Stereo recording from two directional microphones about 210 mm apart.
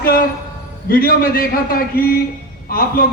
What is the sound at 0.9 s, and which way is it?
A man's voice, 45° left (ahead or behind).